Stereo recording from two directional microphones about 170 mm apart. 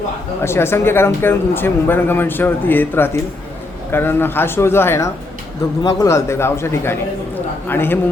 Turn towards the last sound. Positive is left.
turn(degrees=10)  # may be behind; listen again after turning